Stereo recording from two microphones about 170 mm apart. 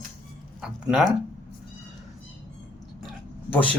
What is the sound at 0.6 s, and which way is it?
Speech, 5° right (ahead or behind).